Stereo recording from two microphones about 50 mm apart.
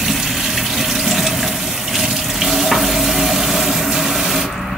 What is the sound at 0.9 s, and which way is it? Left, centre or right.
Water, centre.